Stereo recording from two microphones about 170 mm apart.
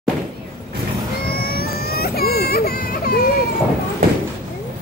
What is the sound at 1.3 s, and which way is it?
Baby cry, 65° left (ahead or behind).